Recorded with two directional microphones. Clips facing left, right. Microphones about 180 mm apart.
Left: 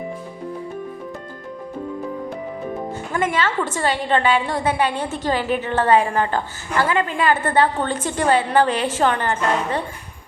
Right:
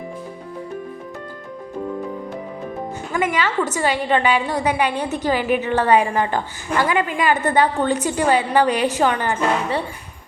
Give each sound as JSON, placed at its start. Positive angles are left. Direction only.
{"t": 3.1, "sound": "a woman's voice", "side_deg": -10}